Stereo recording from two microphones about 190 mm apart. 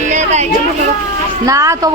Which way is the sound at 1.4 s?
15° right (ahead or behind).